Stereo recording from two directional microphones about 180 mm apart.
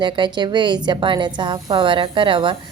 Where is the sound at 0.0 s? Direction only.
25° right (ahead or behind).